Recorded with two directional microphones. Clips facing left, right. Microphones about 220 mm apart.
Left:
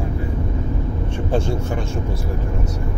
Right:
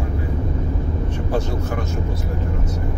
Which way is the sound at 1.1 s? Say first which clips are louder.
Left 3 dB; 30° left (ahead or behind).